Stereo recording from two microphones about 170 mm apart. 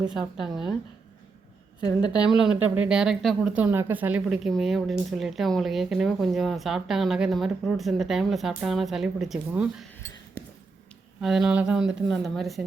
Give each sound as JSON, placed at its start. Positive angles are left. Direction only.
{"t": 0.1, "sound": "speech", "side_deg": -5}
{"t": 1.8, "sound": "a woman's voice", "side_deg": 25}
{"t": 2.3, "sound": "speech", "side_deg": -5}
{"t": 11.2, "sound": "speech", "side_deg": 0}